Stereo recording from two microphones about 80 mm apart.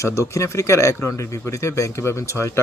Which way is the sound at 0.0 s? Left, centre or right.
Left.